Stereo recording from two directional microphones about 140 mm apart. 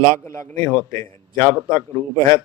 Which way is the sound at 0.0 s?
20° left (ahead or behind).